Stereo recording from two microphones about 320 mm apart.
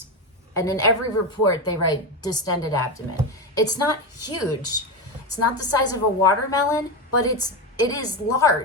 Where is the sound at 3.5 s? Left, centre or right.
Centre.